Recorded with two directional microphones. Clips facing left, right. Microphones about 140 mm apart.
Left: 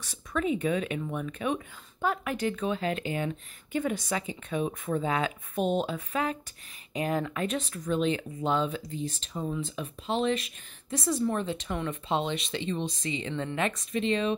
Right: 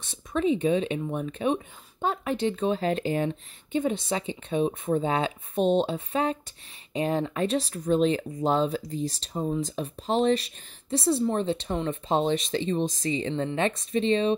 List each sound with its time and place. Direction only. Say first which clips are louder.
0.0 s speech: right 4 dB; 25° right (ahead or behind)